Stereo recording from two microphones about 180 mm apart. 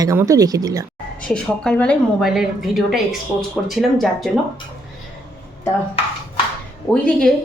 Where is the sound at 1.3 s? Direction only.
5° left (ahead or behind).